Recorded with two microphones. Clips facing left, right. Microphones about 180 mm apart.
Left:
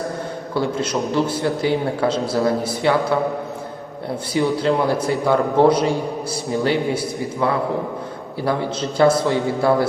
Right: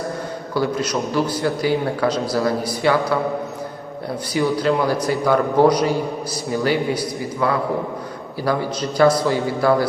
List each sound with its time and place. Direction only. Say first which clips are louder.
0.5 s a man's voice: even; 25° left (ahead or behind)
4.4 s a man's voice: even; 25° left (ahead or behind)
8.4 s a man's voice: even; 25° left (ahead or behind)